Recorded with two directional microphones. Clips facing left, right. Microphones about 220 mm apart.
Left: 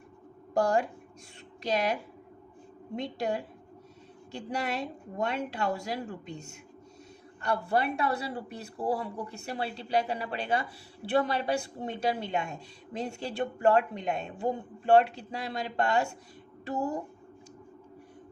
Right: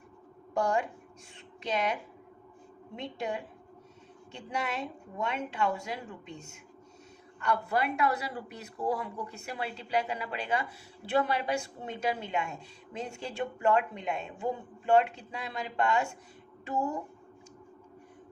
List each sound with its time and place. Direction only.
2.9 s speech: 40° left (ahead or behind)
4.4 s speech: 40° left (ahead or behind)
7.4 s speech: 30° left (ahead or behind)